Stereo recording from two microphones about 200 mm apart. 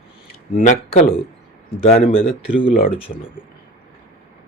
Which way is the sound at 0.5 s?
40° left (ahead or behind).